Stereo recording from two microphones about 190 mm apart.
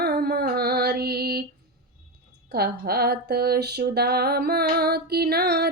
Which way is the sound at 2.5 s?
55° right (ahead or behind).